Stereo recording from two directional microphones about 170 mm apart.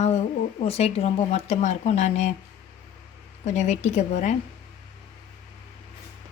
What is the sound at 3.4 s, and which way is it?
Speech, 45° left (ahead or behind).